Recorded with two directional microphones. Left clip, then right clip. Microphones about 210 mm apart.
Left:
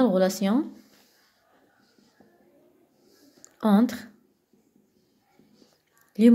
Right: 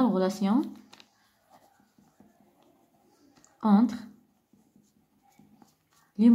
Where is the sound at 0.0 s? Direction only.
20° left (ahead or behind).